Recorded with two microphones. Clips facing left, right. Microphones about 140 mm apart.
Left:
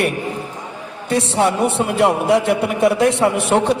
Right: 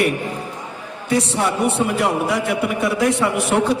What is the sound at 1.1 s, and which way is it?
A man's voice, 25° left (ahead or behind).